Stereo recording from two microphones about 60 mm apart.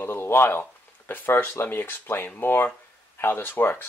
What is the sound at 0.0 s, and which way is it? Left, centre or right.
Speech, left.